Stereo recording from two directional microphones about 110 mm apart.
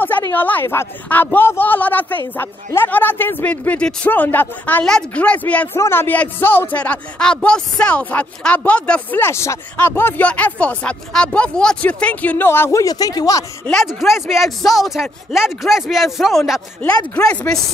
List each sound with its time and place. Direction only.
0.3 s speech: 15° left (ahead or behind)
9.2 s speech: 25° left (ahead or behind)
12.8 s speech: 35° left (ahead or behind)
13.8 s speech: centre (ahead or behind)
17.1 s speech: 10° left (ahead or behind)